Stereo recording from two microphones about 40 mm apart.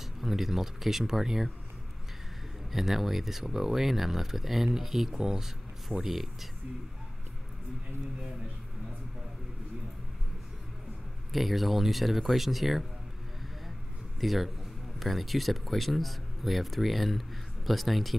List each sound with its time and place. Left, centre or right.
0.2 s speech: centre
2.7 s speech: centre
11.3 s speech: centre
14.2 s speech: centre